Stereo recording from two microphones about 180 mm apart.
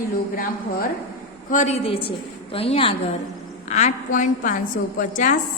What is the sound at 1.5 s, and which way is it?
A woman's voice, 40° left (ahead or behind).